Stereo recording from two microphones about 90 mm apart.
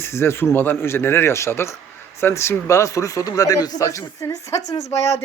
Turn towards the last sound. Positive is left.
turn(degrees=35)  # may be behind; listen again after turning